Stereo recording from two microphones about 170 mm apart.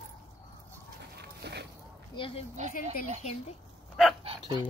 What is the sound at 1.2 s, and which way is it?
Dog, 75° right (ahead or behind).